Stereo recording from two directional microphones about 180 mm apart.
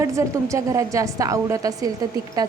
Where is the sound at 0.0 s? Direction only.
15° right (ahead or behind).